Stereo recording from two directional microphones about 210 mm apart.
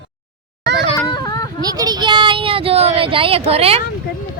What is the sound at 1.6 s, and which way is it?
Speech, 20° right (ahead or behind).